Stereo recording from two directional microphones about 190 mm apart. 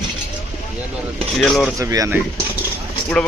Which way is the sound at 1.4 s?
Centre (ahead or behind).